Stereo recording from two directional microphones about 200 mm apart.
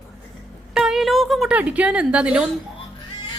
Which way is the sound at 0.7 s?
Centre (ahead or behind).